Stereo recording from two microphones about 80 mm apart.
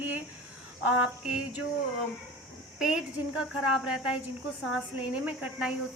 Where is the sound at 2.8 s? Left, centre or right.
Centre.